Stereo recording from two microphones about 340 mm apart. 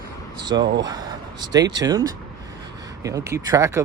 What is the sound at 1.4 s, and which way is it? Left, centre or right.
Speech, centre.